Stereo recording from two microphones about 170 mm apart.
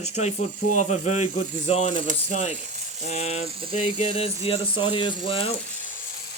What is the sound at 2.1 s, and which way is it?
Speech, 50° right (ahead or behind).